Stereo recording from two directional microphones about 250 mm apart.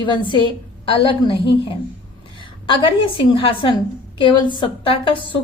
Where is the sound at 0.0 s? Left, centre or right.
Centre.